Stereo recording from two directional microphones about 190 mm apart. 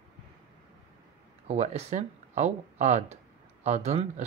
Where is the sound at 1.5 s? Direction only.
35° right (ahead or behind).